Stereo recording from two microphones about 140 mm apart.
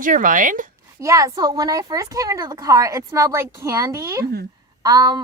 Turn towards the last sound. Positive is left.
turn(degrees=-25)  # may be behind; listen again after turning